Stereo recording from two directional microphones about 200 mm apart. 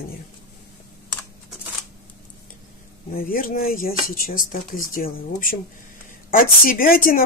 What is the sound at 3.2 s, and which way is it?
Speech, 45° left (ahead or behind).